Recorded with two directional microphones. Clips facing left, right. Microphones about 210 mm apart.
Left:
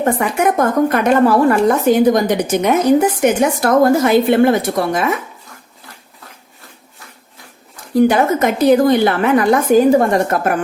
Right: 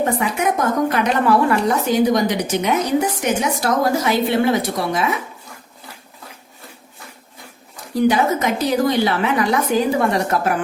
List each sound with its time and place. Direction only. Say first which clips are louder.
0.0 s a woman's voice: left 4 dB; 50° left (ahead or behind)
8.0 s a woman's voice: left 2 dB; 50° left (ahead or behind)